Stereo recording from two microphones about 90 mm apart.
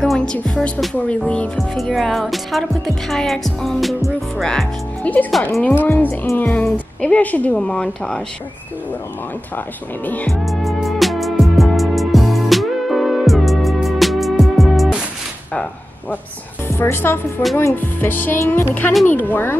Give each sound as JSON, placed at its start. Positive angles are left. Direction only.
{"t": 0.0, "sound": "speech", "side_deg": 5}
{"t": 5.1, "sound": "speech", "side_deg": 15}
{"t": 10.2, "sound": "music", "side_deg": 0}
{"t": 16.6, "sound": "a woman's voice", "side_deg": 25}